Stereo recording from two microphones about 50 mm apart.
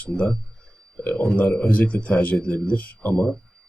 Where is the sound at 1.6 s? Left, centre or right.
Left.